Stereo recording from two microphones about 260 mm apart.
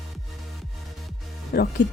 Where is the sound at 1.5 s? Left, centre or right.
Left.